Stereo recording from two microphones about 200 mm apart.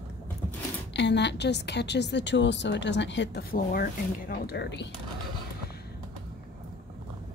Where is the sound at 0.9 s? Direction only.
60° left (ahead or behind).